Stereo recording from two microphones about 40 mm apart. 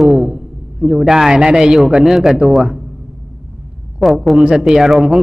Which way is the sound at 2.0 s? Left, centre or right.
Centre.